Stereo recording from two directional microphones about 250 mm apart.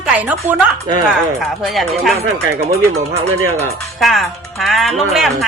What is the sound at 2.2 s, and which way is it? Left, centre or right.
Speech, right.